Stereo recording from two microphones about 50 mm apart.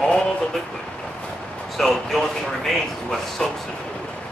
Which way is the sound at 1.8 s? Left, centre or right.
Centre.